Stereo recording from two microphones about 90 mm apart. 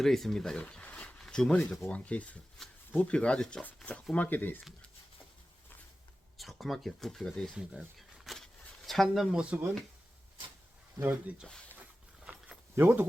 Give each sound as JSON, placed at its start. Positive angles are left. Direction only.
{"t": 0.0, "sound": "speech", "side_deg": 5}
{"t": 2.6, "sound": "a sound", "side_deg": 5}
{"t": 2.9, "sound": "speech", "side_deg": 15}
{"t": 6.3, "sound": "speech", "side_deg": 0}
{"t": 7.5, "sound": "speech", "side_deg": -10}
{"t": 11.0, "sound": "speech", "side_deg": -15}
{"t": 12.2, "sound": "a sound", "side_deg": -10}
{"t": 12.7, "sound": "speech", "side_deg": -30}